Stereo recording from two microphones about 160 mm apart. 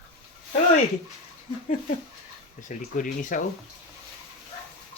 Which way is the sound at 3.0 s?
55° left (ahead or behind).